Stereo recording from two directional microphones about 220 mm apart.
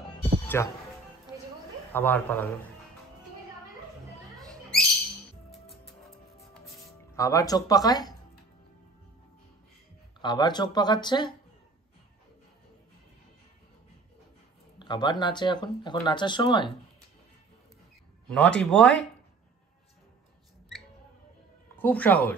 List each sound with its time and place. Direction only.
0.5 s speech: 10° left (ahead or behind)
1.9 s speech: 10° left (ahead or behind)
4.5 s music: centre (ahead or behind)
7.2 s speech: 15° left (ahead or behind)
10.2 s speech: 20° left (ahead or behind)
14.8 s speech: 20° left (ahead or behind)
18.3 s speech: 5° left (ahead or behind)
21.7 s speech: 10° left (ahead or behind)